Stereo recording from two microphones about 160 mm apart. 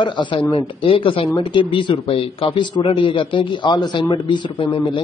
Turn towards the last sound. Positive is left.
turn(degrees=30)  # may be behind; listen again after turning